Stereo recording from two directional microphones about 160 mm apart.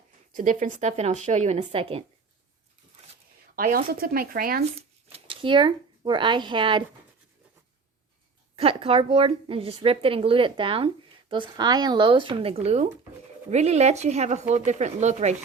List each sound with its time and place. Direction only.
0.3 s speech: 50° right (ahead or behind)
3.5 s speech: 65° right (ahead or behind)
5.1 s speech: 35° right (ahead or behind)
8.5 s a woman's voice: 35° right (ahead or behind)